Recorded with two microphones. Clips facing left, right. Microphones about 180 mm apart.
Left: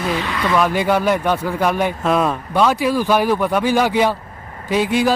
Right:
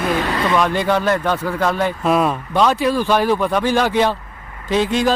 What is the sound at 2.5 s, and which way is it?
Speech, 10° left (ahead or behind).